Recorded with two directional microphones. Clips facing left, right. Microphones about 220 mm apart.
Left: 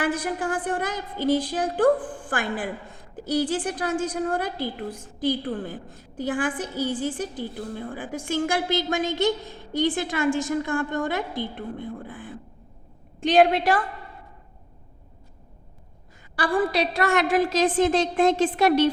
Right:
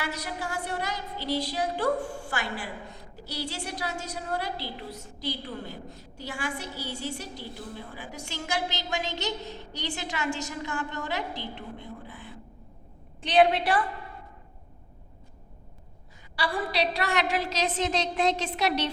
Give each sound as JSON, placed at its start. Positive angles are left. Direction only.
{"t": 0.0, "sound": "a woman's voice", "side_deg": 50}
{"t": 16.3, "sound": "a woman's voice", "side_deg": 50}